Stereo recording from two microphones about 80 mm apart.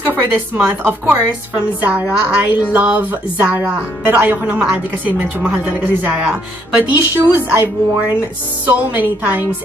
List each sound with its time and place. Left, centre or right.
0.0 s a woman's voice: right
1.0 s a woman's voice: centre
7.2 s a woman's voice: right